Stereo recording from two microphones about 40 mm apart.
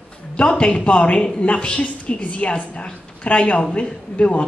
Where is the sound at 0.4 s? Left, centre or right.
Left.